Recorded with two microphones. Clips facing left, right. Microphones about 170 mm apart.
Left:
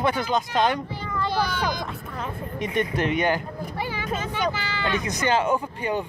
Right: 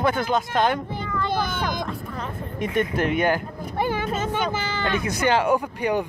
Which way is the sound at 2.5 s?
50° right (ahead or behind).